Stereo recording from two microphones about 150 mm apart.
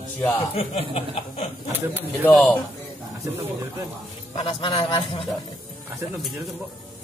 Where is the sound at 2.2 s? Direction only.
Centre (ahead or behind).